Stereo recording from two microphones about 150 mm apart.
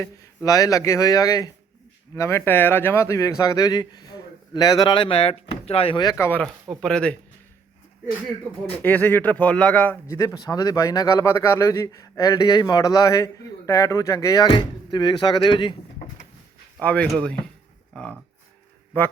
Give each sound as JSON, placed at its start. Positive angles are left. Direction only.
{"t": 0.0, "sound": "speech", "side_deg": 25}
{"t": 6.0, "sound": "speech", "side_deg": 20}
{"t": 6.7, "sound": "speech", "side_deg": 5}
{"t": 8.8, "sound": "speech", "side_deg": 10}
{"t": 16.8, "sound": "speech", "side_deg": 10}